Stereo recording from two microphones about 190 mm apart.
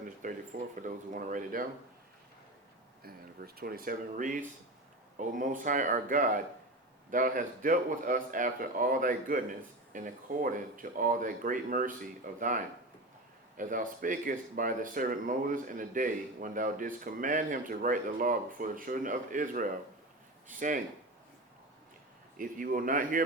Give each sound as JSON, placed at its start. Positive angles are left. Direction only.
{"t": 0.2, "sound": "speech", "side_deg": -45}
{"t": 3.0, "sound": "speech", "side_deg": -50}
{"t": 22.4, "sound": "speech", "side_deg": -45}